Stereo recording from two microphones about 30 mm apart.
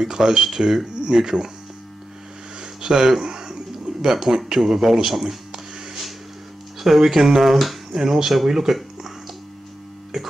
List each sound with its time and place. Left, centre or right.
0.0 s speech: right
2.6 s a sound: right
4.5 s a man's voice: centre
6.8 s a man's voice: centre
7.9 s a man's voice: centre
10.1 s music: centre